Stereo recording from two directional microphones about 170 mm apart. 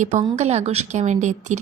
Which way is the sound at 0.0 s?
45° right (ahead or behind).